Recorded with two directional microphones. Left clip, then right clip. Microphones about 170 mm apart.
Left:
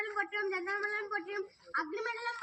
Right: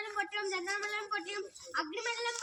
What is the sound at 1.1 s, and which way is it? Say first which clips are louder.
Speech: even; 50° right (ahead or behind).